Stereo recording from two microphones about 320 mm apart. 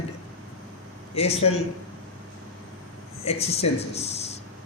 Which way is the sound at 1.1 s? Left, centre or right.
Centre.